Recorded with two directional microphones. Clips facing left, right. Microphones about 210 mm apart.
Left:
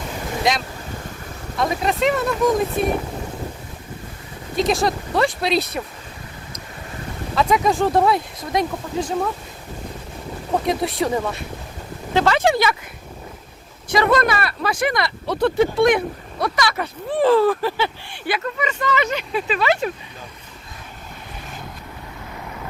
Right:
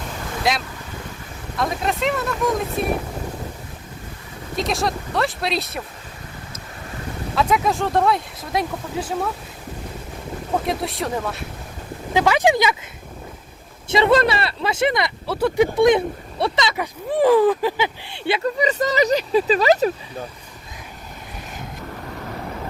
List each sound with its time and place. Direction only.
0.4 s speech: centre (ahead or behind)
4.5 s speech: centre (ahead or behind)
7.3 s speech: centre (ahead or behind)
10.7 s speech: centre (ahead or behind)
12.1 s speech: 10° right (ahead or behind)
13.9 s speech: 25° right (ahead or behind)
15.3 s speech: 10° right (ahead or behind); by 19.9 s 40° right (ahead or behind)